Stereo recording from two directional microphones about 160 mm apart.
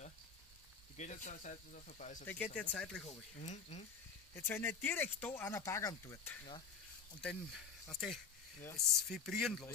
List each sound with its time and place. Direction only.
0.9 s speech: 50° left (ahead or behind)
2.2 s speech: 10° left (ahead or behind)
3.1 s speech: 45° left (ahead or behind)
4.4 s speech: 15° left (ahead or behind)
7.2 s speech: 5° left (ahead or behind)